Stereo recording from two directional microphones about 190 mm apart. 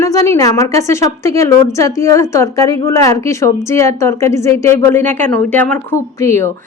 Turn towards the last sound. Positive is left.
turn(degrees=15)  # may be behind; listen again after turning